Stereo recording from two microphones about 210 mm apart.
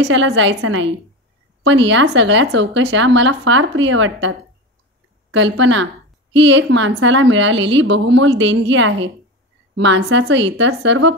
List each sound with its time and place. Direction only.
0.0 s speech: 60° right (ahead or behind)